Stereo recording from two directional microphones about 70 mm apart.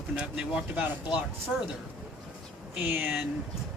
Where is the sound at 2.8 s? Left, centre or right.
Right.